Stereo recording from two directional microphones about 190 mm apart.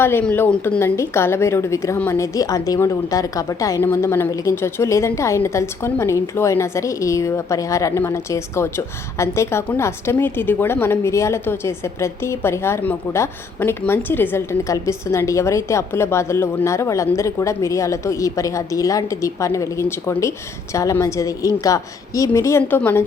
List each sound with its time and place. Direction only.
0.0 s a woman's voice: 10° left (ahead or behind)